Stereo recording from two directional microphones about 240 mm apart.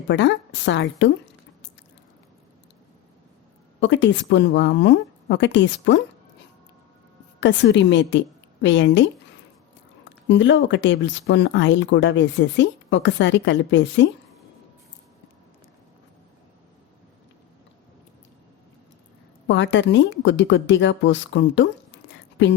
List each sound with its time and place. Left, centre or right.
0.1 s speech: left
3.8 s speech: left
7.3 s speech: left
10.2 s speech: left
19.5 s speech: left
22.1 s a sound: left